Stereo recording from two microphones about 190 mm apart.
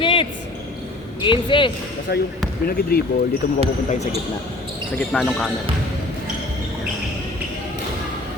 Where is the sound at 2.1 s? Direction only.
60° left (ahead or behind).